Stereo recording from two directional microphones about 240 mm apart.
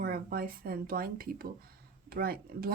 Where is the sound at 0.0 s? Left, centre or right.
Right.